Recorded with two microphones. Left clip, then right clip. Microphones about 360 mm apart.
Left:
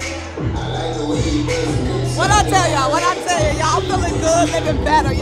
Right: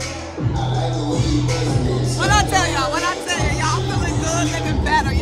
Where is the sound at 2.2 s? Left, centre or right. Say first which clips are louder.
Left 3 dB; centre.